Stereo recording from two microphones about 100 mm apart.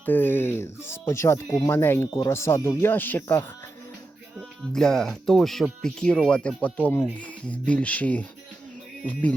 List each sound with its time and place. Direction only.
0.0 s speech: 20° left (ahead or behind)
4.7 s speech: 5° left (ahead or behind)